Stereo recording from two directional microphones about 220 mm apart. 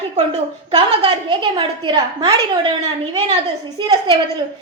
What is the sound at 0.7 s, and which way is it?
A woman's voice, 25° right (ahead or behind).